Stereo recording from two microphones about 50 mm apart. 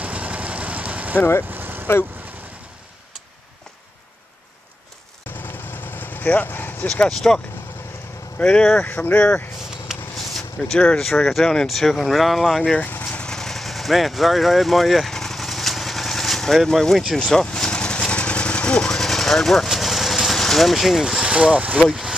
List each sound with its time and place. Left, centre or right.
0.0 s vehicle: right
1.5 s vehicle: right
5.4 s vehicle: left
7.1 s speech: centre
10.1 s a sound: centre
11.0 s speech: centre
12.7 s vehicle: left
13.3 s vehicle: centre
21.2 s speech: right